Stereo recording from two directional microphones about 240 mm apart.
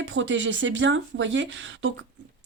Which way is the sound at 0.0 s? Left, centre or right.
Right.